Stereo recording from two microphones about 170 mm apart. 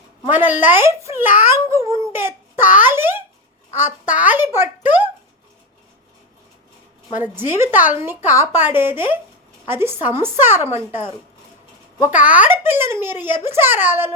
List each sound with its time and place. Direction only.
0.3 s a woman's voice: 10° right (ahead or behind)
2.1 s child singing: 15° right (ahead or behind)
2.7 s a sound: 10° right (ahead or behind)
7.2 s a woman's voice: 10° right (ahead or behind)
12.2 s a woman's voice: 10° right (ahead or behind)